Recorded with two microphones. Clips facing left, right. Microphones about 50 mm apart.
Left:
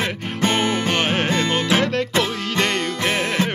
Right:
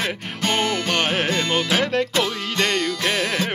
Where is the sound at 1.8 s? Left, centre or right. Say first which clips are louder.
Even; centre.